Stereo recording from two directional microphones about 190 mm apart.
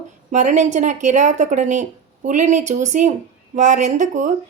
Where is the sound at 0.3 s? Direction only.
40° right (ahead or behind).